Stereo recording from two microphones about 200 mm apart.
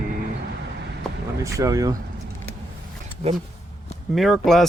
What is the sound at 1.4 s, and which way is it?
Speech, 15° right (ahead or behind).